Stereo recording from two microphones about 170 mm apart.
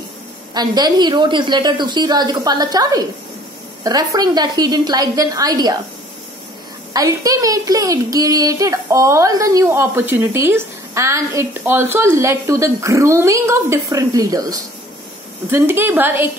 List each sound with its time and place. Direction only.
0.6 s a woman's voice: 25° right (ahead or behind)
6.9 s a woman's voice: 20° right (ahead or behind)